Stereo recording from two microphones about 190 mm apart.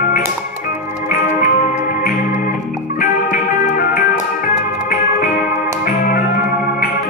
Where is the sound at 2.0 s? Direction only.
50° left (ahead or behind).